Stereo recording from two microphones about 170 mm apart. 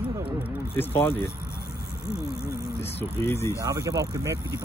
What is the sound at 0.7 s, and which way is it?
Speech, 15° left (ahead or behind).